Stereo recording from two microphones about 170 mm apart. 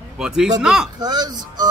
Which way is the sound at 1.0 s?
25° right (ahead or behind).